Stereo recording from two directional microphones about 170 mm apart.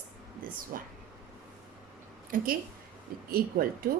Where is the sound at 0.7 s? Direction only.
55° right (ahead or behind).